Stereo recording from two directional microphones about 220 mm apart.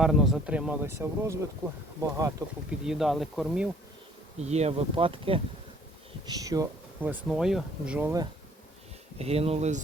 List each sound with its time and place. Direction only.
0.0 s speech: centre (ahead or behind)
2.8 s speech: centre (ahead or behind)
4.4 s speech: 30° right (ahead or behind); by 8.3 s 10° right (ahead or behind)
9.1 s speech: 30° right (ahead or behind)